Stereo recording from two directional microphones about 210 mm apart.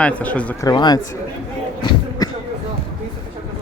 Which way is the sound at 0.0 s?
5° left (ahead or behind).